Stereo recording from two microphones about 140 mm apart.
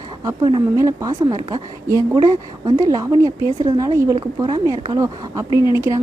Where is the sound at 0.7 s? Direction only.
25° right (ahead or behind).